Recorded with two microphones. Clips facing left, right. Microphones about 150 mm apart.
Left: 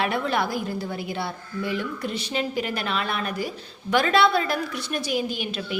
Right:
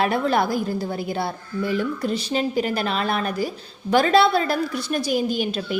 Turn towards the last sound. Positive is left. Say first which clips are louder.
# right 5 dB
turn(degrees=-40)  # may be behind; listen again after turning